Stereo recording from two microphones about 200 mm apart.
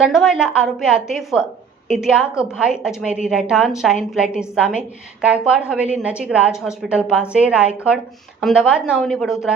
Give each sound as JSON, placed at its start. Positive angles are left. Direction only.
{"t": 0.0, "sound": "a woman's voice", "side_deg": 0}